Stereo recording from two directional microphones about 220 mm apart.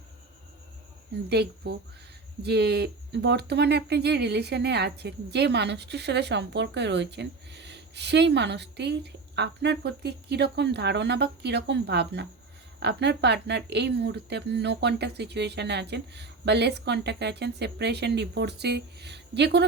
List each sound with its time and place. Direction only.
1.3 s speech: 50° right (ahead or behind)